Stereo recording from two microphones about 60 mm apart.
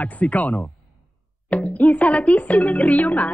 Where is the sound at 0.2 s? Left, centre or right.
Left.